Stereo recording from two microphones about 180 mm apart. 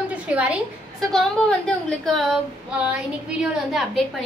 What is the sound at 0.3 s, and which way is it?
Speech, 5° right (ahead or behind).